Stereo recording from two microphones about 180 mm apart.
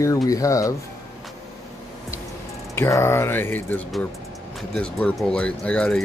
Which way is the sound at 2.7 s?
15° left (ahead or behind).